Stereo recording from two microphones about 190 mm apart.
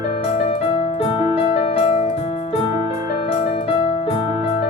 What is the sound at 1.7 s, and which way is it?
Music, 35° left (ahead or behind).